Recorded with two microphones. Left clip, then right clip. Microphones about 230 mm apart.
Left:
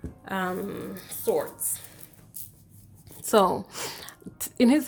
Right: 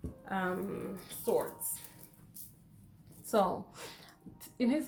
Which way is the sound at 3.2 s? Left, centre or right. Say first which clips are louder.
Left 9 dB; left.